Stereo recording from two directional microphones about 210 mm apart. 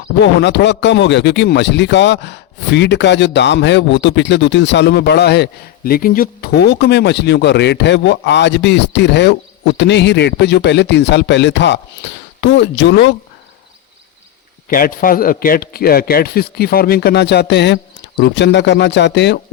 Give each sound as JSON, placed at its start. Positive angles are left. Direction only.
{"t": 0.2, "sound": "speech", "side_deg": 55}
{"t": 14.7, "sound": "a man's voice", "side_deg": 40}